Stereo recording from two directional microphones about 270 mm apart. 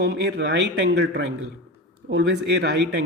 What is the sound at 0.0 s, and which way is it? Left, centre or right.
A man's voice, right.